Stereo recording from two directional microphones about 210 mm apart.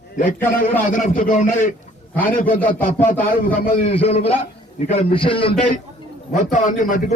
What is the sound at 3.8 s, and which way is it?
A man's voice, 30° left (ahead or behind).